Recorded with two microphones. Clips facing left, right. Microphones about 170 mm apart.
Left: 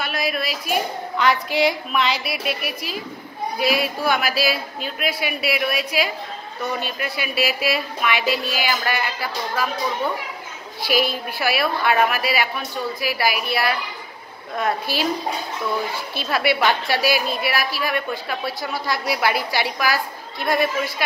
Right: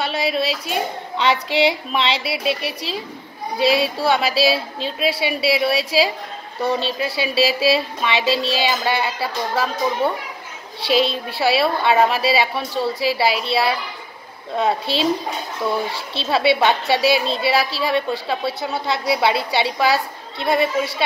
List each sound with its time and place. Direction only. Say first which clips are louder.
0.0 s a woman's voice: right 4 dB; 25° right (ahead or behind)
16.2 s a woman's voice: right 4 dB; 25° right (ahead or behind)